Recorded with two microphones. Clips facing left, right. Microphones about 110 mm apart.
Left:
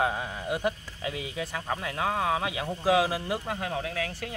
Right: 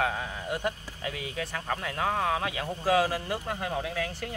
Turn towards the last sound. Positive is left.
turn(degrees=0)  # may be behind; listen again after turning